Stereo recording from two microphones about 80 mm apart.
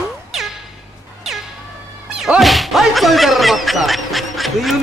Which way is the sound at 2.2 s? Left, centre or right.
Centre.